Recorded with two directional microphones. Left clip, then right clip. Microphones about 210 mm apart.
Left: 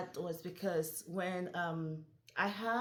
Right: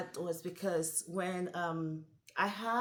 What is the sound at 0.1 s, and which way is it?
A woman's voice, 10° right (ahead or behind).